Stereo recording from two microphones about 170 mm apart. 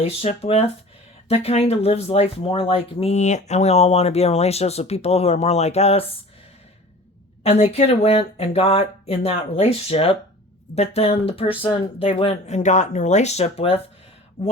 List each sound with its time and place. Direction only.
0.0 s speech: 35° left (ahead or behind)
7.4 s speech: 40° left (ahead or behind)